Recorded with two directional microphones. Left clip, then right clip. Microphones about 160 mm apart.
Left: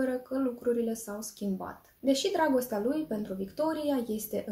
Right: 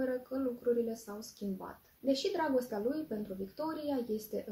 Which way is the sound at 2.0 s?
15° left (ahead or behind).